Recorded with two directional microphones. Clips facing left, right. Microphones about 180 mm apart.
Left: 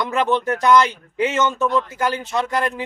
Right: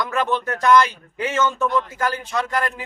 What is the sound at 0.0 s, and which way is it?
Speech, 20° left (ahead or behind).